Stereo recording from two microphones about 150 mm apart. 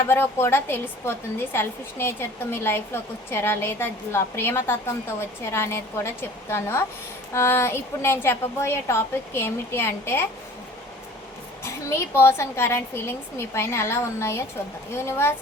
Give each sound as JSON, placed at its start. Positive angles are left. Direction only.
{"t": 0.0, "sound": "a woman's voice", "side_deg": 15}
{"t": 11.6, "sound": "a woman's voice", "side_deg": 15}